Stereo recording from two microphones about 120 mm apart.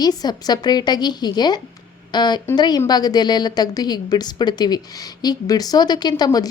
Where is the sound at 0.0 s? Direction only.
35° left (ahead or behind).